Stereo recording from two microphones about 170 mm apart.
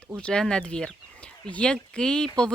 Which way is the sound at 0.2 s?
5° left (ahead or behind).